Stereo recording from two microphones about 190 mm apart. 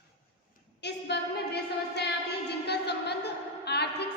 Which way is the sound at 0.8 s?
60° left (ahead or behind).